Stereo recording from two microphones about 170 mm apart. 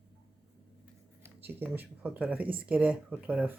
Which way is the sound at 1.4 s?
10° right (ahead or behind).